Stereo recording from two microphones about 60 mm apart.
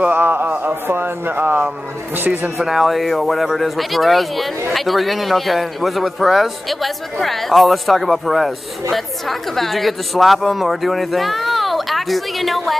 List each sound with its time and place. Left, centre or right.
0.0 s speech: right
2.6 s a man's voice: centre